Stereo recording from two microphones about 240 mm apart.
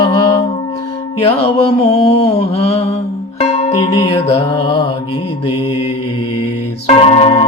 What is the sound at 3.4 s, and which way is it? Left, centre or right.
Music, left.